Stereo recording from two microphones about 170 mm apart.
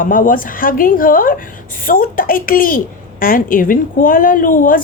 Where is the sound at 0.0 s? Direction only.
55° left (ahead or behind).